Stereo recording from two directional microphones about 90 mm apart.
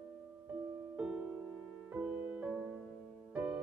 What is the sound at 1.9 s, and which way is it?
Music, 20° right (ahead or behind).